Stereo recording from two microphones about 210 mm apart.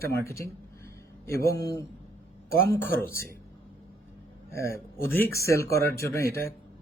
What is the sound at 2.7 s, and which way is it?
Speech, 45° left (ahead or behind).